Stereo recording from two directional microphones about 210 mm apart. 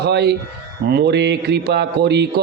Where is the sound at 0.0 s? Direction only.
50° right (ahead or behind).